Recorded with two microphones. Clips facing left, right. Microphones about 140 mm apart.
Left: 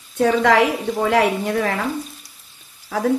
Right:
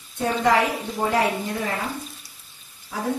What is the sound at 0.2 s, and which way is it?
A woman's voice, 90° left.